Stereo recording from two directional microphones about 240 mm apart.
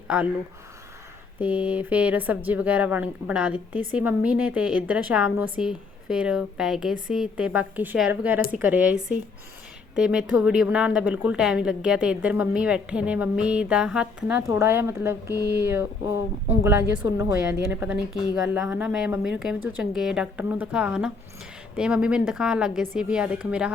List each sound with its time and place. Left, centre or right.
0.1 s a woman's voice: centre
1.4 s a woman's voice: centre